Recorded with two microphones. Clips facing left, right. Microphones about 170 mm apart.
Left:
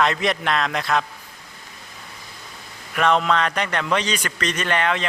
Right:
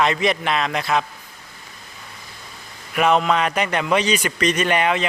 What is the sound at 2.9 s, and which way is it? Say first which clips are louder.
Speech: right 2 dB; 10° right (ahead or behind).